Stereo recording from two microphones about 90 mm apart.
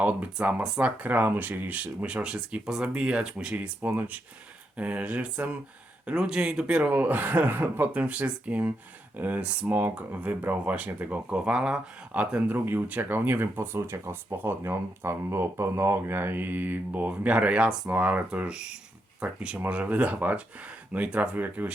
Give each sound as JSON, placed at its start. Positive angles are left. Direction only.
{"t": 0.0, "sound": "speech", "side_deg": -15}